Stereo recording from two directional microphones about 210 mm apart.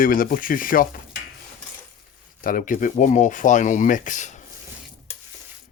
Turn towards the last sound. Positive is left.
turn(degrees=35)  # may be behind; listen again after turning